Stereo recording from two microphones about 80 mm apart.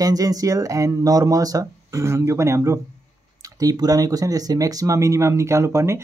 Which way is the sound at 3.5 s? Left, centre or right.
Right.